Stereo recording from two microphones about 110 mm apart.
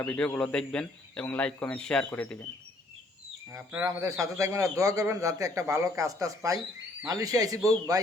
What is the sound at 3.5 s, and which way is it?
A man's voice, 25° right (ahead or behind).